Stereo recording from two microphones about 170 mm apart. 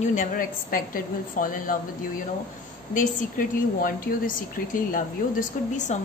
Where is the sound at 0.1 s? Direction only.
50° left (ahead or behind).